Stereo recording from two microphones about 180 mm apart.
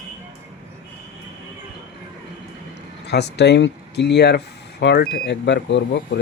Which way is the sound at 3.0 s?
65° left (ahead or behind).